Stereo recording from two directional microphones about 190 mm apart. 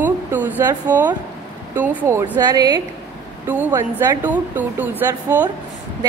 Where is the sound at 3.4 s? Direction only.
10° right (ahead or behind).